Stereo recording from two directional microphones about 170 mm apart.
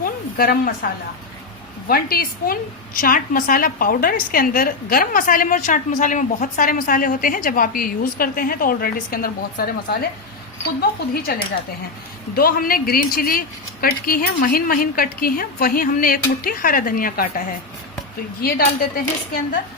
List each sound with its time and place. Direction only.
0.0 s a sound: 60° left (ahead or behind)
1.9 s a woman's voice: 60° left (ahead or behind)
18.4 s a woman's voice: 65° left (ahead or behind)